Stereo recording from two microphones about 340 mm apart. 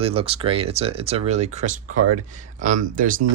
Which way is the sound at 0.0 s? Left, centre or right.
Centre.